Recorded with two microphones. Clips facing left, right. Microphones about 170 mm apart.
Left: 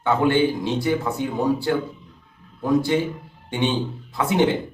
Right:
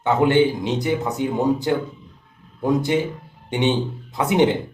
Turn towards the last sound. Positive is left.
turn(degrees=-20)  # may be behind; listen again after turning